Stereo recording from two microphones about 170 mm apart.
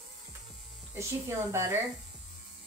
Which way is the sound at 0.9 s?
15° right (ahead or behind).